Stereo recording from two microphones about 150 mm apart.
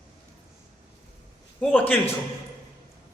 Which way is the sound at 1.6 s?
10° left (ahead or behind).